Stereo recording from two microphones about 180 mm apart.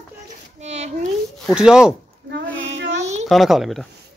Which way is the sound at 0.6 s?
35° right (ahead or behind).